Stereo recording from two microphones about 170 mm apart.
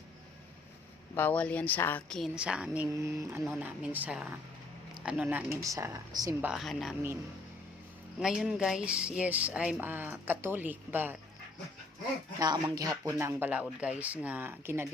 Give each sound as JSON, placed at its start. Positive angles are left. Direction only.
{"t": 1.1, "sound": "a woman's voice", "side_deg": 10}
{"t": 6.5, "sound": "a woman's voice", "side_deg": 0}
{"t": 8.2, "sound": "speech", "side_deg": 0}
{"t": 12.4, "sound": "speech", "side_deg": -25}